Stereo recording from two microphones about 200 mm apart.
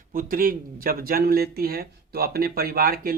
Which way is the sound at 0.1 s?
45° right (ahead or behind).